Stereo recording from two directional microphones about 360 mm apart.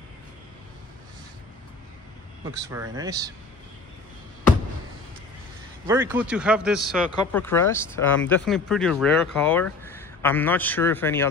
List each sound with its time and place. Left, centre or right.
2.7 s speech: centre
5.9 s speech: centre